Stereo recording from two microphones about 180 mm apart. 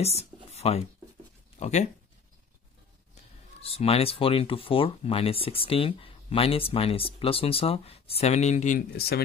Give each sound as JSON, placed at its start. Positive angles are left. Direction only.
{"t": 0.0, "sound": "speech", "side_deg": 35}
{"t": 0.5, "sound": "a sound", "side_deg": 35}
{"t": 1.6, "sound": "speech", "side_deg": 40}
{"t": 3.6, "sound": "speech", "side_deg": 35}